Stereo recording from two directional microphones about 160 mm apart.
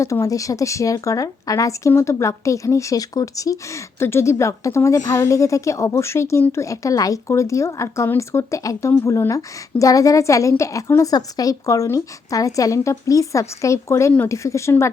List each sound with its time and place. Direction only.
0.0 s speech: 20° left (ahead or behind)